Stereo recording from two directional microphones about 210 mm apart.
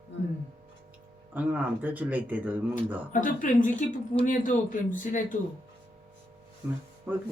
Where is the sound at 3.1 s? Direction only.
35° left (ahead or behind).